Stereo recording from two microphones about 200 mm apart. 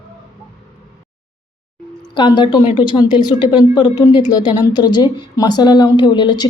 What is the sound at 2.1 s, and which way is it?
A woman's voice, 20° left (ahead or behind).